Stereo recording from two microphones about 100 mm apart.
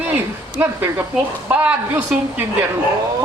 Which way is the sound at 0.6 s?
20° right (ahead or behind).